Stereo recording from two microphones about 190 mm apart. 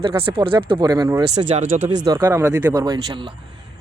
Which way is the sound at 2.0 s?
15° right (ahead or behind).